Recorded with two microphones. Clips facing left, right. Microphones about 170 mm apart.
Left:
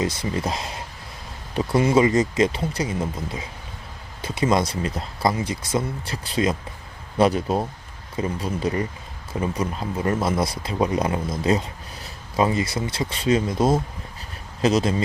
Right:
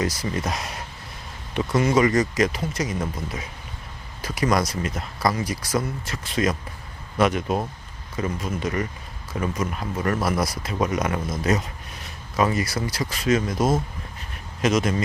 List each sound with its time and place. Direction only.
0.0 s speech: 25° left (ahead or behind)
12.4 s speech: 25° left (ahead or behind)